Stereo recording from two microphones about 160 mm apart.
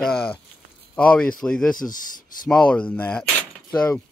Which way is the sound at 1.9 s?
55° left (ahead or behind).